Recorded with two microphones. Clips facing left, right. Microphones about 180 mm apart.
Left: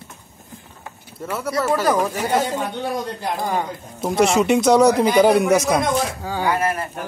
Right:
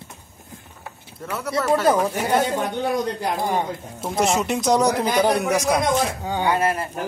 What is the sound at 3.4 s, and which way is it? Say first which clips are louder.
Speech: left 1 dB; 25° right (ahead or behind).